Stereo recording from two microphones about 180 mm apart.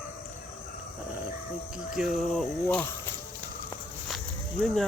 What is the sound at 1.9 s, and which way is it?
Speech, centre (ahead or behind).